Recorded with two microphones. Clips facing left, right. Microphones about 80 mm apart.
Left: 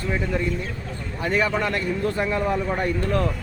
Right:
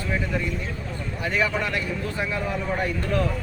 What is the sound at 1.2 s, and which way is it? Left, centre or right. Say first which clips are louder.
A man's voice: left 3 dB; left.